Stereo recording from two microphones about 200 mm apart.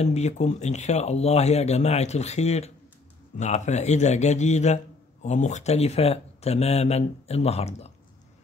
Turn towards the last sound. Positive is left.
turn(degrees=30)  # may be behind; listen again after turning